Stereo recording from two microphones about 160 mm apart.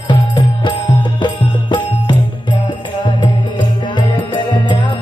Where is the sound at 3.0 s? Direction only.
30° left (ahead or behind).